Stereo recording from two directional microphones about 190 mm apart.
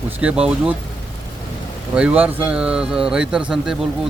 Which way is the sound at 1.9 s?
5° right (ahead or behind).